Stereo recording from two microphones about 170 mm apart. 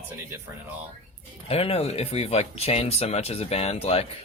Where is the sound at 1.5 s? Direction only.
35° left (ahead or behind).